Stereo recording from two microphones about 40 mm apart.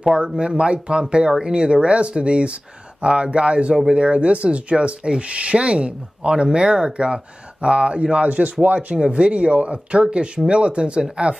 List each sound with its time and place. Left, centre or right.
0.4 s speech: right
3.7 s speech: centre
4.0 s speech: right
8.9 s speech: right